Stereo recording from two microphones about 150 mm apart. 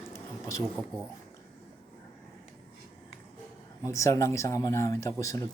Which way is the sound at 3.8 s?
20° left (ahead or behind).